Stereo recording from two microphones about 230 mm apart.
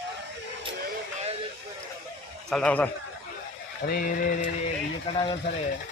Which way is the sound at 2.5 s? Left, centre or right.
Centre.